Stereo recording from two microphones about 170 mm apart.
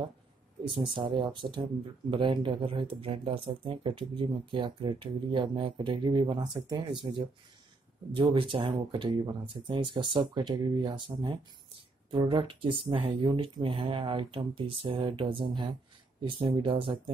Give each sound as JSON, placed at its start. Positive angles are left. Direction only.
{"t": 0.7, "sound": "speech", "side_deg": -30}